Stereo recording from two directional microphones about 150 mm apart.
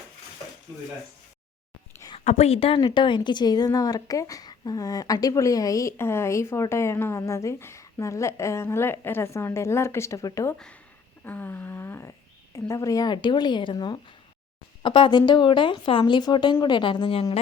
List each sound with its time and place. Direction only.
2.1 s speech: 45° left (ahead or behind); by 10.5 s 20° left (ahead or behind)
11.3 s a sound: 10° left (ahead or behind)
12.5 s speech: 20° left (ahead or behind); by 17.2 s 35° left (ahead or behind)